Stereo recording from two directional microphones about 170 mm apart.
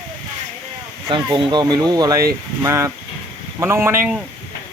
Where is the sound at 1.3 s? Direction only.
25° right (ahead or behind).